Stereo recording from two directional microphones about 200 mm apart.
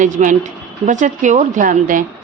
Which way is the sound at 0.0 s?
40° right (ahead or behind).